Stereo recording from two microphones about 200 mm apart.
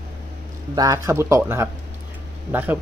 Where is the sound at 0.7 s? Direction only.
15° right (ahead or behind).